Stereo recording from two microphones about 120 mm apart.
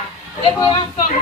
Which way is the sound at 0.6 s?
35° left (ahead or behind).